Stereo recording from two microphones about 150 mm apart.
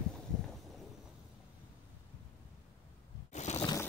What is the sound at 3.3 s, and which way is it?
Zipper, 50° left (ahead or behind).